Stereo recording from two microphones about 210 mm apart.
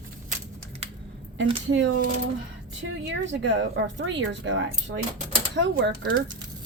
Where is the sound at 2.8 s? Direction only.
60° right (ahead or behind).